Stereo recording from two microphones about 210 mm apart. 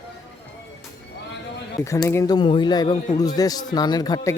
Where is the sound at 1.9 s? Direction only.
15° left (ahead or behind).